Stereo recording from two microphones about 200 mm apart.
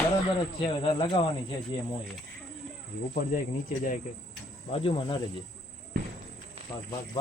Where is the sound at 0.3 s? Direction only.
25° left (ahead or behind).